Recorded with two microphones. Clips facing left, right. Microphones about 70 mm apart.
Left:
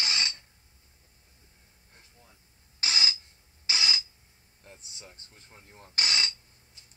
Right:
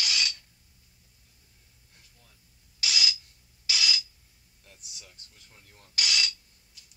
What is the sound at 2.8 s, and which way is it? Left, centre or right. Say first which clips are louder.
Rub: even; left.